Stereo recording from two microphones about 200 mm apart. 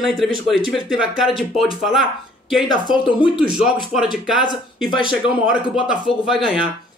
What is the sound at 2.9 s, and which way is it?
Speech, 5° right (ahead or behind).